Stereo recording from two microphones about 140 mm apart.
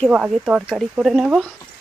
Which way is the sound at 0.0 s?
5° right (ahead or behind).